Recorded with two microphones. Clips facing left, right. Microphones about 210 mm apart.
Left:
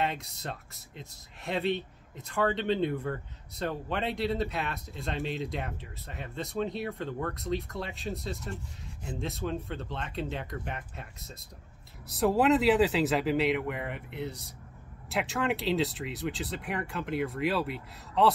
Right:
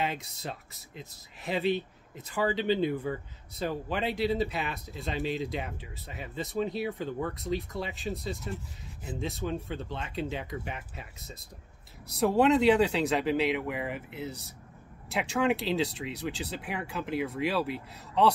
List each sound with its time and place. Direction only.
0.0 s speech: centre (ahead or behind)